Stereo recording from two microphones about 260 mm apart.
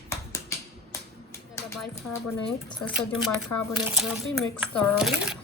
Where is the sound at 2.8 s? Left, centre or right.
Centre.